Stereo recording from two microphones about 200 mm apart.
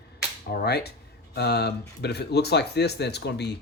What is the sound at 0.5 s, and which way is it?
Speech, 55° left (ahead or behind).